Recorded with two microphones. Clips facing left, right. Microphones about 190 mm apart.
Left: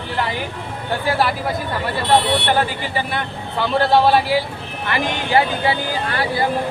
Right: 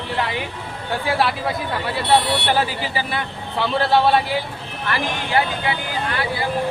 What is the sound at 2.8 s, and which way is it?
A man's voice, 5° right (ahead or behind).